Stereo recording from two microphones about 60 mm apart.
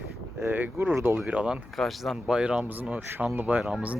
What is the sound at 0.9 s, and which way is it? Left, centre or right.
Speech, right.